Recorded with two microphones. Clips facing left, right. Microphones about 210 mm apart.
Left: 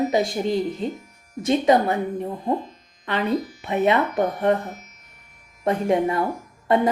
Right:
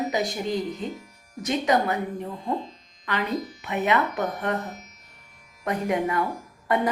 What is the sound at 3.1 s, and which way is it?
Speech, 30° left (ahead or behind).